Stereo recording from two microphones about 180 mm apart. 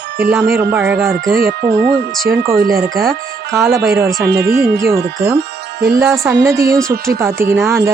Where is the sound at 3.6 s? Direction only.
15° right (ahead or behind).